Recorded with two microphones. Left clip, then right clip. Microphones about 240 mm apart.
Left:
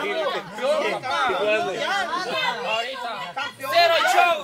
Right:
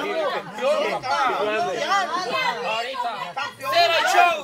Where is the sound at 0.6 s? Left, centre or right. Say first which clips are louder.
Right 1 dB; centre.